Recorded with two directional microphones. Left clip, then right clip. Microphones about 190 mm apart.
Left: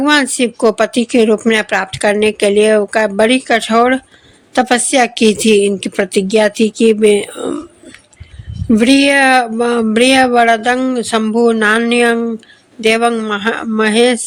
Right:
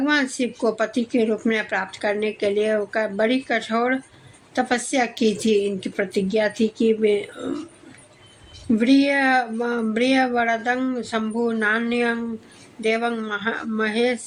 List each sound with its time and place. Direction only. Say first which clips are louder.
0.0 s speech: left 10 dB; 40° left (ahead or behind)
8.7 s speech: left 9 dB; 40° left (ahead or behind)